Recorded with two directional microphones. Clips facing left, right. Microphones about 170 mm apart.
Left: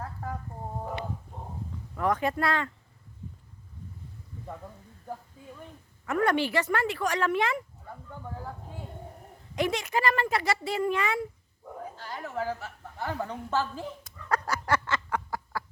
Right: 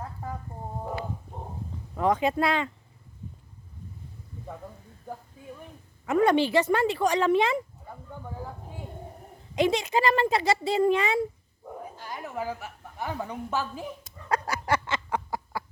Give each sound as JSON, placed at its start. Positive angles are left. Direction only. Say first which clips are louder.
{"t": 0.0, "sound": "a sound", "louder": "even", "side_deg": -15}
{"t": 2.0, "sound": "speech", "louder": "right 3 dB", "side_deg": -20}
{"t": 6.1, "sound": "speech", "louder": "right 4 dB", "side_deg": -20}
{"t": 9.6, "sound": "speech", "louder": "right 4 dB", "side_deg": -25}
{"t": 11.9, "sound": "a woman's voice", "louder": "left 1 dB", "side_deg": -15}
{"t": 14.0, "sound": "a sound", "louder": "right 1 dB", "side_deg": -20}